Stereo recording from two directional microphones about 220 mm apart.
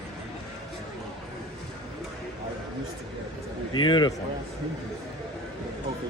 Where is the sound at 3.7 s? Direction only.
20° left (ahead or behind).